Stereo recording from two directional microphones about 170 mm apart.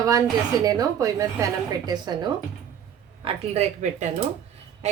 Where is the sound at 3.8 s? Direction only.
45° right (ahead or behind).